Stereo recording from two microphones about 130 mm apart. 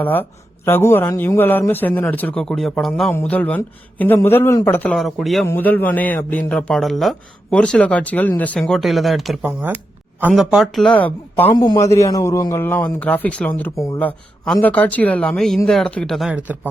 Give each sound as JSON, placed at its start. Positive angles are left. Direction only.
{"t": 0.0, "sound": "speech", "side_deg": 15}
{"t": 3.1, "sound": "speech", "side_deg": 15}
{"t": 4.9, "sound": "speech", "side_deg": 0}
{"t": 5.5, "sound": "speech", "side_deg": 15}
{"t": 9.4, "sound": "speech", "side_deg": -15}
{"t": 10.3, "sound": "speech", "side_deg": 0}
{"t": 11.5, "sound": "a man's voice", "side_deg": 35}